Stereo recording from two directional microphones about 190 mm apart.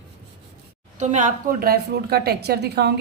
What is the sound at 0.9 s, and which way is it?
Speech, 40° right (ahead or behind).